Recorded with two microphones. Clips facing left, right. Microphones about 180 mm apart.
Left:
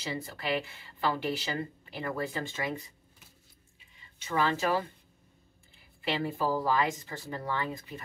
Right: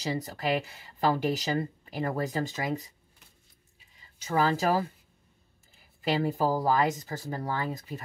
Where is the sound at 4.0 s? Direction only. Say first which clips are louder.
Right 3 dB; 40° right (ahead or behind).